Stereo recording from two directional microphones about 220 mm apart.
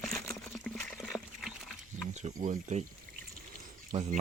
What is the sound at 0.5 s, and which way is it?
Pig, 5° left (ahead or behind).